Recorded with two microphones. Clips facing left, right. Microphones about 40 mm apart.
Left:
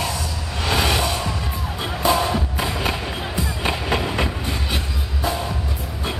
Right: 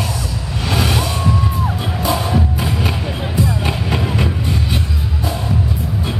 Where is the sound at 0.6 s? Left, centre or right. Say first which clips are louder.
Right 1 dB; centre.